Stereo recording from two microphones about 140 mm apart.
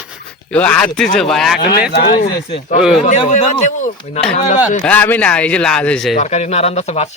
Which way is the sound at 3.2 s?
55° left (ahead or behind).